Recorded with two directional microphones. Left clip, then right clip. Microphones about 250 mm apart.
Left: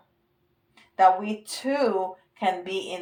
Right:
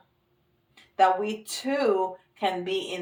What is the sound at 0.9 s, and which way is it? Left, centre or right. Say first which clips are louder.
Speech: left 2 dB; left.